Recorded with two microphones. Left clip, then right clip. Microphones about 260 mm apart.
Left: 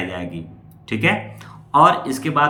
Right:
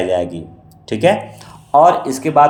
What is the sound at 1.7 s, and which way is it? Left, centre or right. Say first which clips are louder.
Speech: right 3 dB; centre.